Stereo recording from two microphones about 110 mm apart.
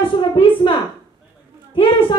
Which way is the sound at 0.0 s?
50° left (ahead or behind).